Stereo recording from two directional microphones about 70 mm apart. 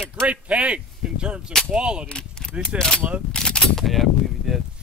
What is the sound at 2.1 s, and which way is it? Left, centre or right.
Speech, centre.